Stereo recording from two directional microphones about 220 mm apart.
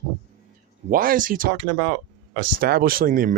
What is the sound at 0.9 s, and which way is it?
Speech, 40° right (ahead or behind).